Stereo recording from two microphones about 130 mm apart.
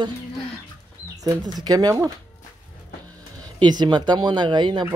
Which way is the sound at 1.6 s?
30° right (ahead or behind).